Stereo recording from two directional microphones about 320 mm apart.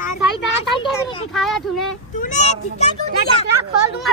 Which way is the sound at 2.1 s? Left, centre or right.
Left.